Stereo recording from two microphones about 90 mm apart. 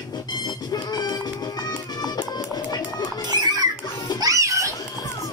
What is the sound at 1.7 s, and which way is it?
Music, 50° left (ahead or behind).